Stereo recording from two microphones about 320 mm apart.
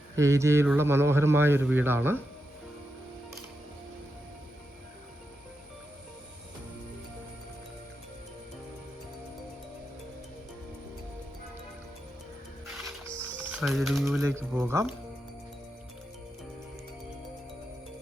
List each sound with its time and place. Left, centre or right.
0.2 s a man's voice: centre
12.6 s music: centre